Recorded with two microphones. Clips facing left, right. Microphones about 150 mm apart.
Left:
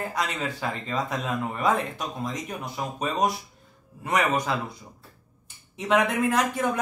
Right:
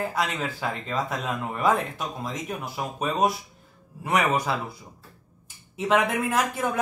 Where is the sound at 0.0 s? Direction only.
Centre (ahead or behind).